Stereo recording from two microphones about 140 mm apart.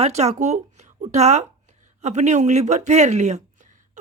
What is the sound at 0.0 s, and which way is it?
Speech, 50° right (ahead or behind).